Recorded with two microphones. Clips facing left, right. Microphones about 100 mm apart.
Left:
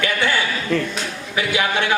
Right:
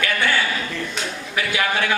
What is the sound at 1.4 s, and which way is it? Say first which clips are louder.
Speech: left 2 dB; 20° left (ahead or behind).